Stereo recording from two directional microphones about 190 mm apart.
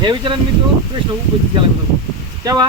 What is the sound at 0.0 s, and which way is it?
Speech, 25° right (ahead or behind).